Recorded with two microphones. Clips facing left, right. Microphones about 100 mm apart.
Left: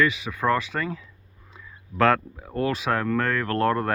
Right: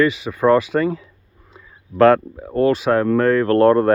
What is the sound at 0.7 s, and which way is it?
Speech, 30° right (ahead or behind).